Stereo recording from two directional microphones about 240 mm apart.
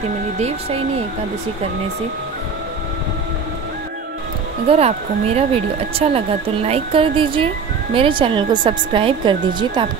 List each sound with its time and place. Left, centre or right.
4.6 s speech: right